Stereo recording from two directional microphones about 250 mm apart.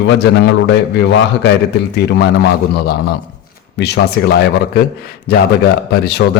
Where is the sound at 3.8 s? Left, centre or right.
Left.